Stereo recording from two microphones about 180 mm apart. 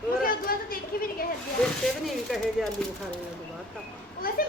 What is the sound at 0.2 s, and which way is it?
Chatter, 55° left (ahead or behind).